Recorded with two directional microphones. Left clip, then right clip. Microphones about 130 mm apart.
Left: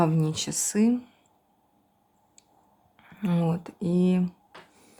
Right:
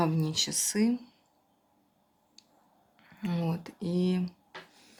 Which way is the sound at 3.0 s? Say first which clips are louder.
Left 6 dB; 35° left (ahead or behind).